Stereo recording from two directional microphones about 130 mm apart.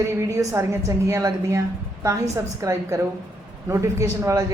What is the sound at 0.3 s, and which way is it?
Speech, 25° right (ahead or behind).